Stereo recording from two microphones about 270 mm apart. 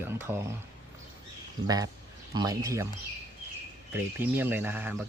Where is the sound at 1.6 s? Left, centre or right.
Centre.